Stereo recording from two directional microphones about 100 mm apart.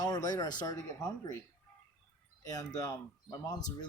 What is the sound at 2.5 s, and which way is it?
Speech, 40° left (ahead or behind).